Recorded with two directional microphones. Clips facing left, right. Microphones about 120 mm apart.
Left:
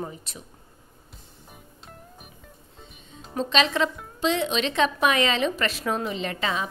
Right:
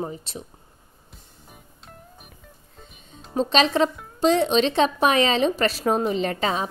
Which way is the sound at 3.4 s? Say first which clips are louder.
Right 4 dB; 35° right (ahead or behind).